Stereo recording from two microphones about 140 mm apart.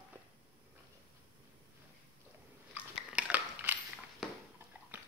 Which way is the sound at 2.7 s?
10° right (ahead or behind).